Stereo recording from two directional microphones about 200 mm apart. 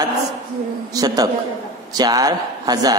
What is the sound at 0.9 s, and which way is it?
A man's voice, 20° right (ahead or behind).